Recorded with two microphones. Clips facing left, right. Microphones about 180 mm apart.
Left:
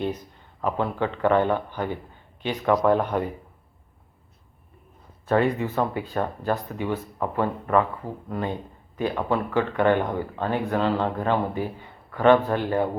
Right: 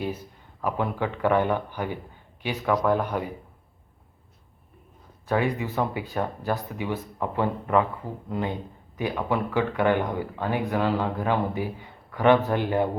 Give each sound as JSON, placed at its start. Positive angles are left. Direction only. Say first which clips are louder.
{"t": 0.0, "sound": "a man's voice", "louder": "left 3 dB", "side_deg": -10}
{"t": 5.3, "sound": "speech", "louder": "left 3 dB", "side_deg": 0}
{"t": 5.9, "sound": "a man's voice", "louder": "left 2 dB", "side_deg": -15}